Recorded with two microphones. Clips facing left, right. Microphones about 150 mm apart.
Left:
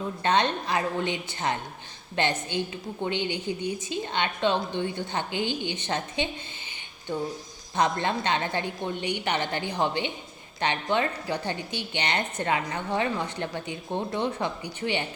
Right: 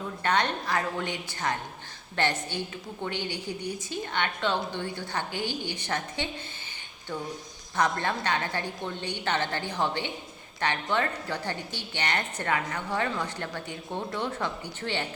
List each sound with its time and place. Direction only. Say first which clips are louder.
0.2 s a woman's voice: left 3 dB; 20° left (ahead or behind)
7.8 s a woman's voice: left 2 dB; 20° left (ahead or behind)